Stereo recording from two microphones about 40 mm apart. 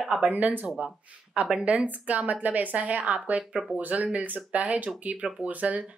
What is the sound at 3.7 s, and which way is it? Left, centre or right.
Speech, right.